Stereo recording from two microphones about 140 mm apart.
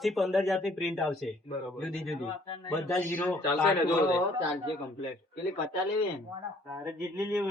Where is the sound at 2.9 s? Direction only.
20° left (ahead or behind).